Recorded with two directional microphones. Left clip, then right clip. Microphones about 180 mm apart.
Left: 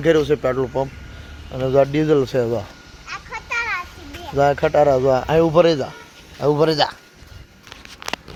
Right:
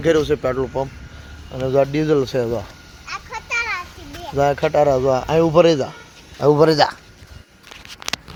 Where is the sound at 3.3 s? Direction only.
45° right (ahead or behind).